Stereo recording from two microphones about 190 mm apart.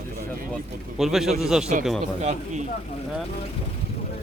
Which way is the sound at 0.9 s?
Centre (ahead or behind).